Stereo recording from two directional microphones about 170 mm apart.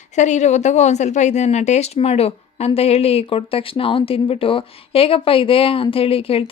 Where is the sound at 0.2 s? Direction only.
45° left (ahead or behind).